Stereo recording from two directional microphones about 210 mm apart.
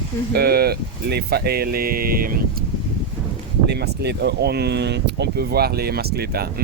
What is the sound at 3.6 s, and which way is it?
Speech, 50° right (ahead or behind).